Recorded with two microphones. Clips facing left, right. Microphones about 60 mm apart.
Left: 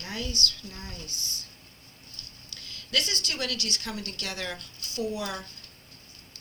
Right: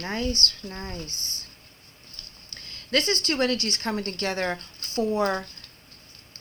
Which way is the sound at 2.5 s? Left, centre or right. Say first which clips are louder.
Right 8 dB; right.